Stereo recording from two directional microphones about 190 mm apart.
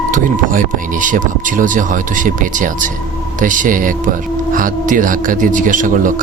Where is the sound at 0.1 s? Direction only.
45° right (ahead or behind).